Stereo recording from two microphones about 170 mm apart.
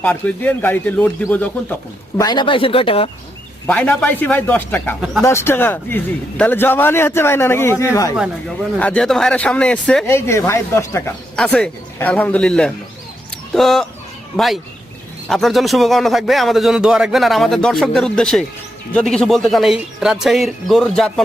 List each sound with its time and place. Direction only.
0.0 s a man's voice: 5° left (ahead or behind)
2.1 s speech: 25° left (ahead or behind)
3.7 s a man's voice: 10° left (ahead or behind)
4.9 s speech: 5° right (ahead or behind)
5.2 s a man's voice: 15° left (ahead or behind)
8.8 s a man's voice: 5° left (ahead or behind)
11.3 s a man's voice: 5° left (ahead or behind)